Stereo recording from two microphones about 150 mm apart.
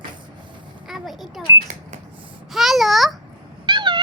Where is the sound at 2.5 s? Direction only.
Centre (ahead or behind).